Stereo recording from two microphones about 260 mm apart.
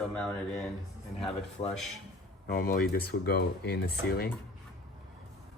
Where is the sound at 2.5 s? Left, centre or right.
Left.